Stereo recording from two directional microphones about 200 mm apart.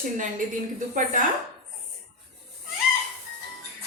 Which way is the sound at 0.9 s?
40° right (ahead or behind).